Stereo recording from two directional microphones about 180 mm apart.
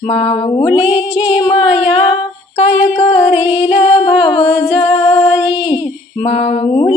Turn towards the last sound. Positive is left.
turn(degrees=30)  # may be behind; listen again after turning